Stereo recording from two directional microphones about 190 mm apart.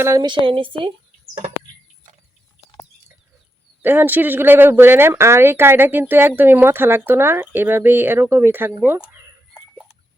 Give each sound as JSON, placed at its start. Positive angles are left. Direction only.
{"t": 0.0, "sound": "a woman's voice", "side_deg": -20}
{"t": 3.8, "sound": "speech", "side_deg": -10}